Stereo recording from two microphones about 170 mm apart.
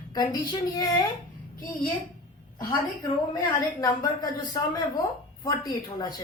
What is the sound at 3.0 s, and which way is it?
A woman's voice, 25° left (ahead or behind).